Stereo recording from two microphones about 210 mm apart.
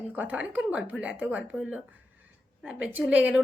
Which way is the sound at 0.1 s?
5° right (ahead or behind).